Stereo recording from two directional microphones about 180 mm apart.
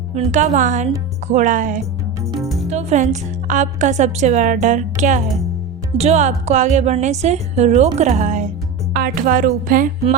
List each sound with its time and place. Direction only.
0.1 s a woman's voice: 40° right (ahead or behind)
2.4 s music: centre (ahead or behind)
2.6 s a woman's voice: 40° right (ahead or behind)
8.9 s a woman's voice: 55° right (ahead or behind)